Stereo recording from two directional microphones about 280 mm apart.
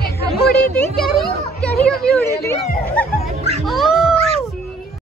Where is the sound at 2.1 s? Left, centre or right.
Centre.